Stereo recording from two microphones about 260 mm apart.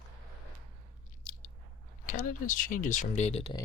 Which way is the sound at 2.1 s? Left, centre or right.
Left.